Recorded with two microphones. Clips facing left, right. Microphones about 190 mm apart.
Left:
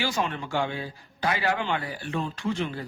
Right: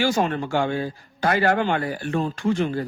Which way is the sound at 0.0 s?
45° right (ahead or behind).